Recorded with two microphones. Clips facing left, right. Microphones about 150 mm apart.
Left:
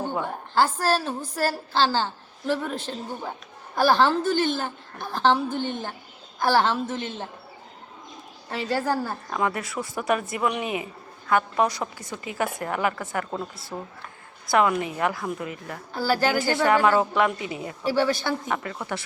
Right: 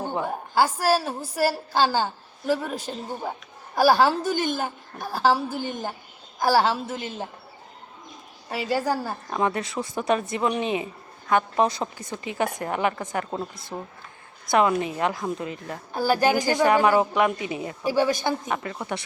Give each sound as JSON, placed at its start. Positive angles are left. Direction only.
{"t": 0.1, "sound": "a woman's voice", "side_deg": -10}
{"t": 8.4, "sound": "a woman's voice", "side_deg": -15}